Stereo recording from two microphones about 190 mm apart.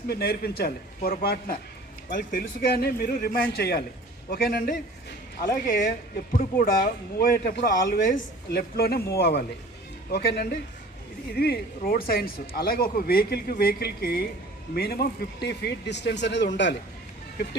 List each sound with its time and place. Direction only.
0.1 s a man's voice: 55° left (ahead or behind)